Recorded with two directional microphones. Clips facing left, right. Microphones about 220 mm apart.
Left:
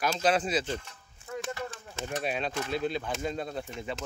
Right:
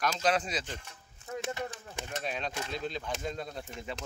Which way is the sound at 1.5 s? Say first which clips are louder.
Even; 15° right (ahead or behind).